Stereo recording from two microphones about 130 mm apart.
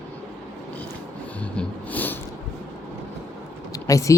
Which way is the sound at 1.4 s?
10° left (ahead or behind).